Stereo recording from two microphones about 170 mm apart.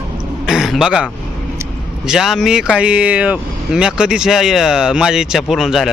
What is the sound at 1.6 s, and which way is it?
Vehicle, 15° right (ahead or behind).